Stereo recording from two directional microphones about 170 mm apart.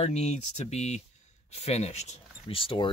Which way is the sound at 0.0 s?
40° left (ahead or behind).